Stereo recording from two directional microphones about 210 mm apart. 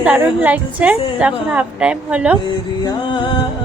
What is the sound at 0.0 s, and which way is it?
A woman's voice, 5° right (ahead or behind).